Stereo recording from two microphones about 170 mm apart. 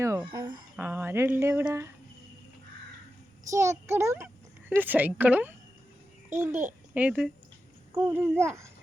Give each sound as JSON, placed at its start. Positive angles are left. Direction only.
{"t": 0.0, "sound": "a sound", "side_deg": -15}
{"t": 0.3, "sound": "speech", "side_deg": -25}
{"t": 0.8, "sound": "speech", "side_deg": -10}
{"t": 3.5, "sound": "speech", "side_deg": -15}